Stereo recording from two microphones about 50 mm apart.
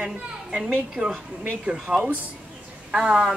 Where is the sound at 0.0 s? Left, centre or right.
Centre.